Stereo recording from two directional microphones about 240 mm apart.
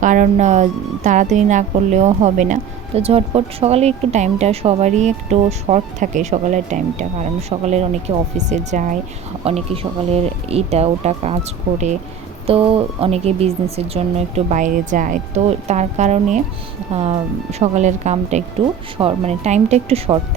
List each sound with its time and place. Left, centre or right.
0.0 s speech: right
12.5 s speech: right